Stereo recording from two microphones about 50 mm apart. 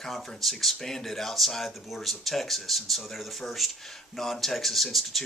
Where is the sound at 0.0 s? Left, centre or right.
Centre.